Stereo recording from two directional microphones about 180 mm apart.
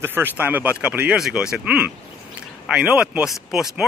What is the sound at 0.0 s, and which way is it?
Speech, 10° right (ahead or behind).